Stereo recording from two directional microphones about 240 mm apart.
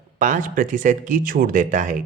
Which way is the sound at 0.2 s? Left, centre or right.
Right.